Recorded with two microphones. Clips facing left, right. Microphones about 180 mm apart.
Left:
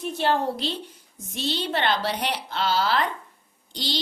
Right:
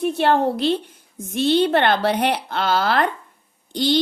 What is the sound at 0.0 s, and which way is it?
A woman's voice, 60° right (ahead or behind).